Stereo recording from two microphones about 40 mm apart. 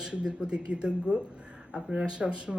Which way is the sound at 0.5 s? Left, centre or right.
Right.